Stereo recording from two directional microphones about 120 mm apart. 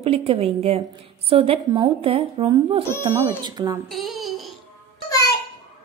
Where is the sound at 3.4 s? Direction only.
35° right (ahead or behind).